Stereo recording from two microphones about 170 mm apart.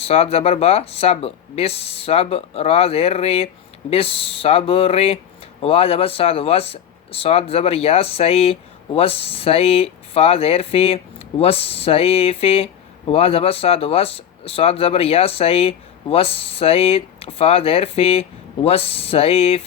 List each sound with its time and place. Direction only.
0.0 s speech: 35° left (ahead or behind)